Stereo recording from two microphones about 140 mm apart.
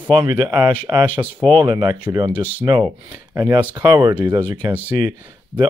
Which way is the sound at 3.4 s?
15° right (ahead or behind).